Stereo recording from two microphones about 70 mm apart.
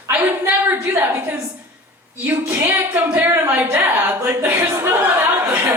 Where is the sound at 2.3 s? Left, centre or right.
Right.